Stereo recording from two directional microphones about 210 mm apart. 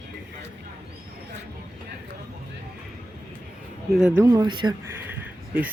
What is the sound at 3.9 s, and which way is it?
Speech, 10° right (ahead or behind).